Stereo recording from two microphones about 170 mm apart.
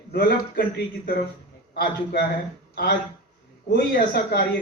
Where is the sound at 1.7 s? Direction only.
65° left (ahead or behind).